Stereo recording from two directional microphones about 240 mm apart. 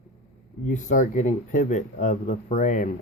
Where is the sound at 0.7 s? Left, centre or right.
Left.